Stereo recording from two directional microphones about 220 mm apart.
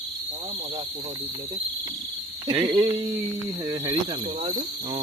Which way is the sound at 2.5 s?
20° right (ahead or behind).